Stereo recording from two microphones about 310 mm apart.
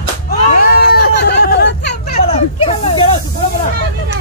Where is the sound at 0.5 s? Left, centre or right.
Left.